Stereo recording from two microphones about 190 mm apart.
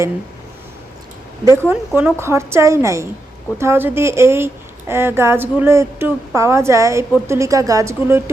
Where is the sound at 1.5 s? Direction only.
10° right (ahead or behind).